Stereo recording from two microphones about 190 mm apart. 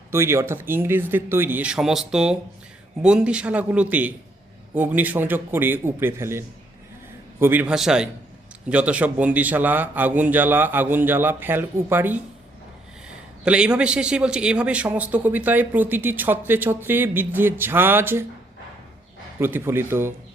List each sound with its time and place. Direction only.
0.1 s a man's voice: 15° right (ahead or behind)
13.4 s a man's voice: 5° right (ahead or behind)
19.4 s a man's voice: 10° right (ahead or behind)